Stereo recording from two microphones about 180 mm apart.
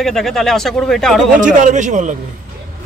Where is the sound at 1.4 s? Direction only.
45° right (ahead or behind).